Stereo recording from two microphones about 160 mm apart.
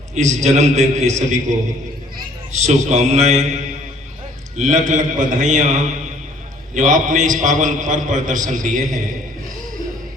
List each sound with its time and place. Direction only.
0.1 s a man's voice: 45° right (ahead or behind)
4.5 s a man's voice: 50° right (ahead or behind)